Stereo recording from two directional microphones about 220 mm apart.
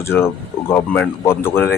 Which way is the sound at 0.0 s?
10° left (ahead or behind).